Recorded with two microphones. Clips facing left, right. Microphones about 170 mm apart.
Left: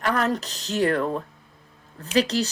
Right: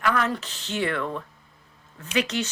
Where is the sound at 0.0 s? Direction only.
40° left (ahead or behind).